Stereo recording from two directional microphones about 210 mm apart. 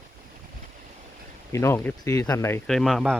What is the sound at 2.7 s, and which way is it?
Speech, centre (ahead or behind).